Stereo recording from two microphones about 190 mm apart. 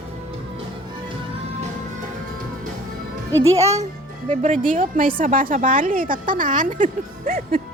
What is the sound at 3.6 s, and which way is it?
A woman's voice, 35° right (ahead or behind).